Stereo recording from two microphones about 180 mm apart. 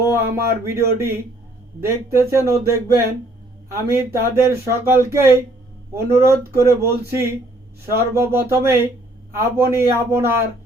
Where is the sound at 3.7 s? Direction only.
15° right (ahead or behind).